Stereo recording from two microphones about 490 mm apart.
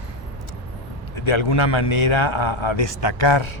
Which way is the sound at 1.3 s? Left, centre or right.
Left.